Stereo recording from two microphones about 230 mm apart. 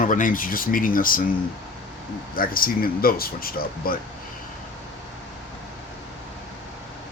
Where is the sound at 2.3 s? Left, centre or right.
Left.